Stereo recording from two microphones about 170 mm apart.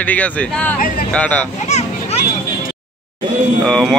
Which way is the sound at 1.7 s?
40° left (ahead or behind).